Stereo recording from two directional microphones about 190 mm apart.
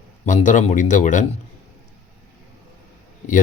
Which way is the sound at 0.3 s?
40° left (ahead or behind).